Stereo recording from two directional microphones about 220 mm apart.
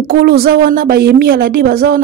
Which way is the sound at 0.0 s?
45° right (ahead or behind).